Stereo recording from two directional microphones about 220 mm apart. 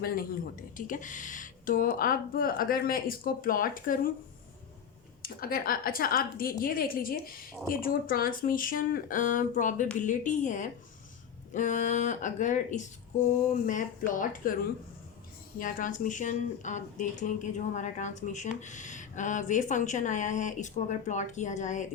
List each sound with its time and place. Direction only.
0.0 s speech: 40° left (ahead or behind)
5.2 s speech: 40° left (ahead or behind)